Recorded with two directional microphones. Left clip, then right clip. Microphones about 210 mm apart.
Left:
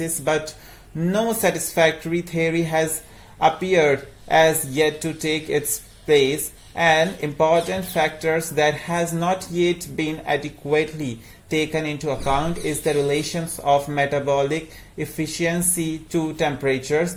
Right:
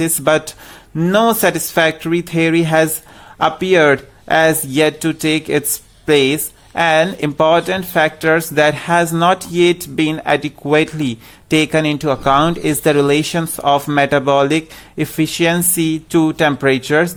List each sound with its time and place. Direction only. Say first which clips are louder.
0.9 s speech: right 9 dB; 45° right (ahead or behind)